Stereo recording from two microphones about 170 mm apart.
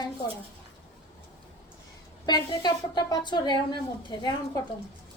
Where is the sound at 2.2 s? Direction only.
25° left (ahead or behind).